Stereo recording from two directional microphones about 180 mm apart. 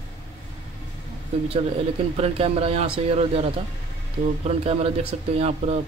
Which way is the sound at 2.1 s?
35° right (ahead or behind).